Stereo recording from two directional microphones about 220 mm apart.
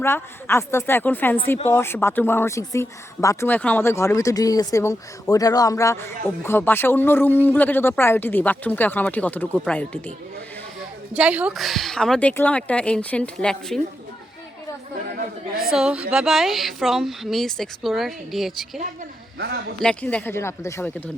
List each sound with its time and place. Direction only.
0.0 s speech: 10° left (ahead or behind)
10.8 s a woman's voice: 5° right (ahead or behind)
15.7 s a woman's voice: 5° right (ahead or behind)
19.8 s speech: 5° left (ahead or behind)